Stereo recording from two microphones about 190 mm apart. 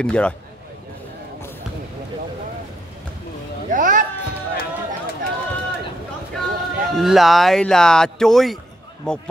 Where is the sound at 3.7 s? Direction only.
45° right (ahead or behind).